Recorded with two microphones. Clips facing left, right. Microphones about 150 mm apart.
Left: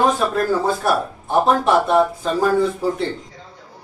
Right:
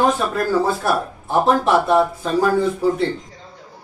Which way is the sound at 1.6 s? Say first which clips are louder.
Even; centre (ahead or behind).